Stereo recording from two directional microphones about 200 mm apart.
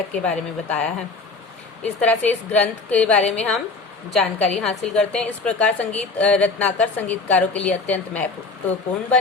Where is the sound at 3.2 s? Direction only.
35° left (ahead or behind).